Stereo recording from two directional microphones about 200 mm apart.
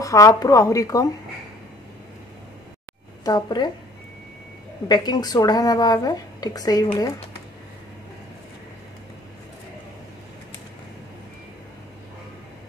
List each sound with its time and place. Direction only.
0.0 s a woman's voice: 15° left (ahead or behind)
3.3 s speech: 20° left (ahead or behind)
4.8 s speech: 20° left (ahead or behind)